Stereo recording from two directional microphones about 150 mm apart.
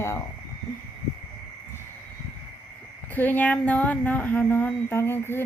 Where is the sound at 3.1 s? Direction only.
10° left (ahead or behind).